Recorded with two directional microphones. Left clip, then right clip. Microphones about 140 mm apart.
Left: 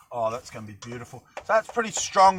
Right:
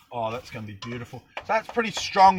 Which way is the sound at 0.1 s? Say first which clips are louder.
Left 2 dB; centre (ahead or behind).